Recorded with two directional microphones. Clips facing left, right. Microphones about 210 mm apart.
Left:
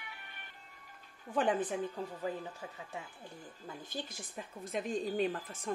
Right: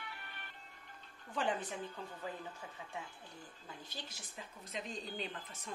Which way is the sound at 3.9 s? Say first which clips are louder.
Left 8 dB; 50° left (ahead or behind).